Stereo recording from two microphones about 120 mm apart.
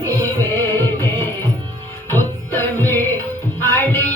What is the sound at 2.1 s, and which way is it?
Music, 15° left (ahead or behind).